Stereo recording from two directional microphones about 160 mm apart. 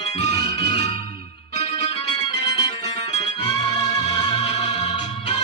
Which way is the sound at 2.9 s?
40° left (ahead or behind).